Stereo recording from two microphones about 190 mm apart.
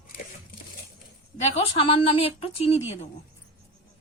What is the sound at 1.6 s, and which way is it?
A woman's voice, 30° left (ahead or behind).